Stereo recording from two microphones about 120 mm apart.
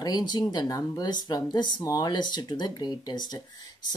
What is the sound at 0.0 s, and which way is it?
Speech, 35° left (ahead or behind).